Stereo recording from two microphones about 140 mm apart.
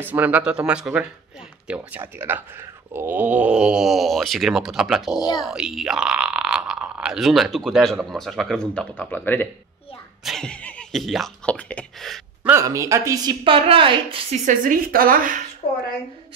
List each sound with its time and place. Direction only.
0.0 s speech: 15° right (ahead or behind); by 12.2 s 5° left (ahead or behind)
12.4 s a woman's voice: 20° right (ahead or behind); by 14.2 s 40° right (ahead or behind)
14.4 s a woman's voice: 70° right (ahead or behind)
15.6 s a woman's voice: 40° left (ahead or behind)